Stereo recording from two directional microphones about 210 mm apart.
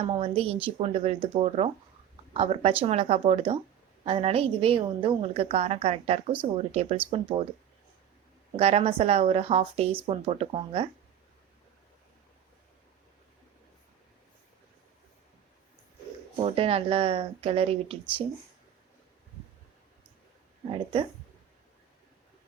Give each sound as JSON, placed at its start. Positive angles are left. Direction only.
{"t": 0.0, "sound": "a woman's voice", "side_deg": -25}
{"t": 8.5, "sound": "a woman's voice", "side_deg": -30}
{"t": 16.4, "sound": "a woman's voice", "side_deg": -25}
{"t": 20.7, "sound": "a woman's voice", "side_deg": -25}